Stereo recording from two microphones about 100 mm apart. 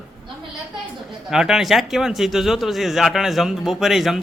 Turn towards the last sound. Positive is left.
turn(degrees=0)  # may be behind; listen again after turning